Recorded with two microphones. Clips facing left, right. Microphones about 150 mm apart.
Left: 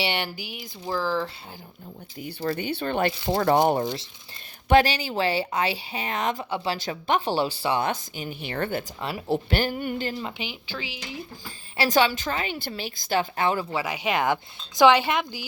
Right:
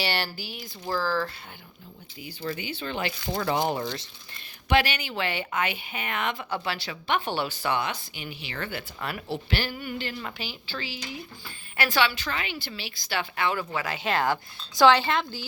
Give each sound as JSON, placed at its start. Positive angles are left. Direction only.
{"t": 0.0, "sound": "speech", "side_deg": 20}
{"t": 2.1, "sound": "speech", "side_deg": 45}
{"t": 4.7, "sound": "a woman's voice", "side_deg": 40}
{"t": 7.8, "sound": "speech", "side_deg": 45}
{"t": 9.0, "sound": "speech", "side_deg": 25}
{"t": 9.3, "sound": "speech", "side_deg": 45}
{"t": 10.2, "sound": "speech", "side_deg": 20}
{"t": 11.9, "sound": "a woman's voice", "side_deg": 45}
{"t": 13.8, "sound": "speech", "side_deg": 15}